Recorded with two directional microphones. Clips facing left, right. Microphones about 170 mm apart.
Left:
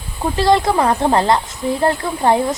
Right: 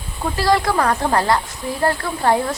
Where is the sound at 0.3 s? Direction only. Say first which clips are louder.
Left 3 dB; 25° left (ahead or behind).